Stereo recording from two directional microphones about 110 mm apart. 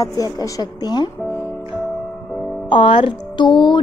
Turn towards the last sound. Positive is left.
turn(degrees=45)  # may be behind; listen again after turning